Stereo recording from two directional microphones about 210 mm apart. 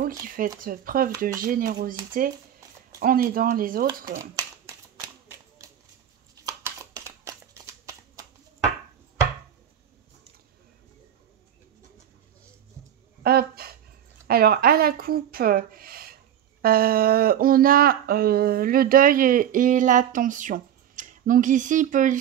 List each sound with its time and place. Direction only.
0.0 s speech: 40° right (ahead or behind)
4.2 s shuffling cards: 15° right (ahead or behind)
7.2 s shuffling cards: 15° right (ahead or behind)
13.2 s a sound: 45° right (ahead or behind)
14.2 s speech: 45° right (ahead or behind)